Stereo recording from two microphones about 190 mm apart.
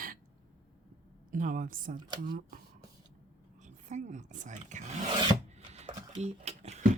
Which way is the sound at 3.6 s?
40° right (ahead or behind).